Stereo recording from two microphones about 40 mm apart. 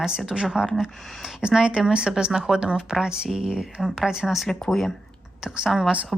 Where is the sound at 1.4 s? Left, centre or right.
Right.